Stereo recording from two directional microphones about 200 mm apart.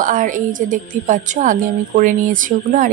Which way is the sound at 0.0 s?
40° right (ahead or behind).